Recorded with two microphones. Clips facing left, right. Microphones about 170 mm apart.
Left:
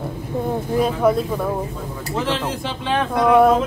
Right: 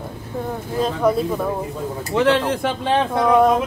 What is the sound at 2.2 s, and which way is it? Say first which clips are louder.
Speech: right 6 dB; 65° right (ahead or behind).